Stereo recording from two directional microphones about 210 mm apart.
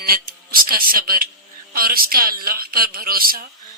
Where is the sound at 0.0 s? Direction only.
45° right (ahead or behind).